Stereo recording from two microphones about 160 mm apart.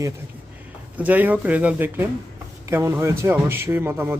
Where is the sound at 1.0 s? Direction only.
10° right (ahead or behind).